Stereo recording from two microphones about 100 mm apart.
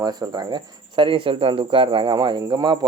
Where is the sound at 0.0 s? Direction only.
45° right (ahead or behind).